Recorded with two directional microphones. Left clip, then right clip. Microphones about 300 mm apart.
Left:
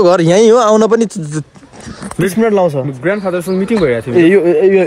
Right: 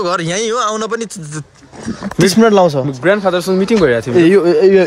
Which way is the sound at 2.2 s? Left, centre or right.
Right.